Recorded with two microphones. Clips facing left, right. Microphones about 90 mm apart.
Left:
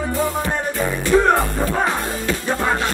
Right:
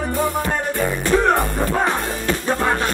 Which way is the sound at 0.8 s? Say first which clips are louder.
Left 2 dB; 15° left (ahead or behind).